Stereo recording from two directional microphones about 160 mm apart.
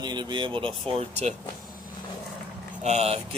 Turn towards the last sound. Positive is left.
turn(degrees=-40)  # may be behind; listen again after turning